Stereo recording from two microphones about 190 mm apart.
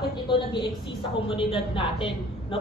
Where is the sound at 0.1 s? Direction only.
25° left (ahead or behind).